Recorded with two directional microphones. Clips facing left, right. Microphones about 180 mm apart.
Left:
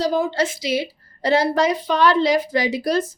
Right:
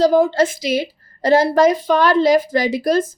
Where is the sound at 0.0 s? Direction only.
50° right (ahead or behind).